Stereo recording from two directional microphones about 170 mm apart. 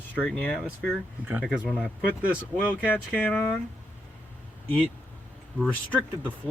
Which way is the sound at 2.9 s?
10° left (ahead or behind).